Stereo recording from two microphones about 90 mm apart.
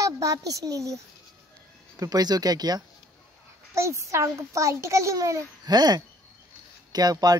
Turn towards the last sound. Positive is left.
turn(degrees=-45)  # may be behind; listen again after turning